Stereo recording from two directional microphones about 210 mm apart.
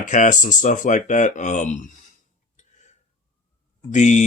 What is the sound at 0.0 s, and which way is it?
Speech, 35° left (ahead or behind).